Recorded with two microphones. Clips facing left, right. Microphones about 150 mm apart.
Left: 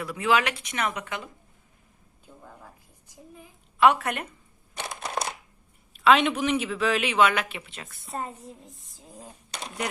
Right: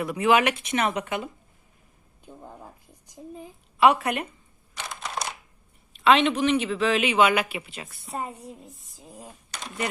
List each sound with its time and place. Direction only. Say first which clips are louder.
0.0 s speech: right 4 dB; 20° right (ahead or behind)
2.2 s a sound: right 5 dB; 25° right (ahead or behind)
3.2 s speech: right 8 dB; 30° right (ahead or behind)
3.8 s a man's voice: right 1 dB; centre (ahead or behind)
4.8 s a sound: left 2 dB; 55° left (ahead or behind)
6.0 s a man's voice: right 1 dB; centre (ahead or behind)